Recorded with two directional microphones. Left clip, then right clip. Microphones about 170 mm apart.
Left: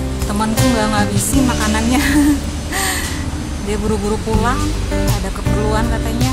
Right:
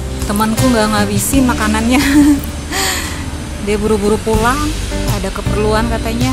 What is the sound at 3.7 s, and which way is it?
Music, 25° right (ahead or behind).